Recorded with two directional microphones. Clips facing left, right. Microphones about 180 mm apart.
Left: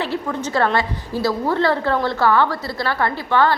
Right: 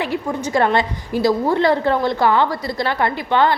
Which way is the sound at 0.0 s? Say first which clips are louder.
Right 1 dB; 15° right (ahead or behind).